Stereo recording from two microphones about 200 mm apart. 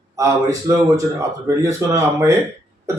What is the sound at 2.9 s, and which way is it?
Cough, 15° right (ahead or behind).